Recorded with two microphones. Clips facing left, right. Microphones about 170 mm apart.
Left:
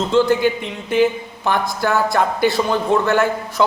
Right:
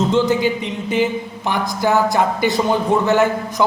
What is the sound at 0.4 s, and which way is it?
A man's voice, 15° right (ahead or behind).